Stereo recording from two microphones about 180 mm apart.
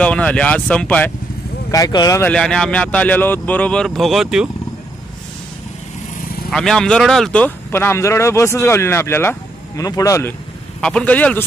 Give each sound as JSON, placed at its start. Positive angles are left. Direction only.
{"t": 0.0, "sound": "speech", "side_deg": 5}
{"t": 1.7, "sound": "speech", "side_deg": 20}
{"t": 2.3, "sound": "speech", "side_deg": 5}
{"t": 6.5, "sound": "speech", "side_deg": 5}
{"t": 10.8, "sound": "speech", "side_deg": 5}